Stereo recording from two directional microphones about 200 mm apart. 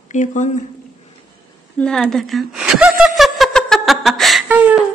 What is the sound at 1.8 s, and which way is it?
Speech, 5° left (ahead or behind).